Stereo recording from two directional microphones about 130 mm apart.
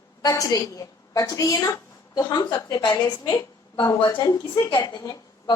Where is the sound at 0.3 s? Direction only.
30° left (ahead or behind).